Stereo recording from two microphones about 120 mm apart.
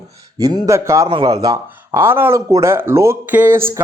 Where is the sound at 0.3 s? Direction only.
30° right (ahead or behind).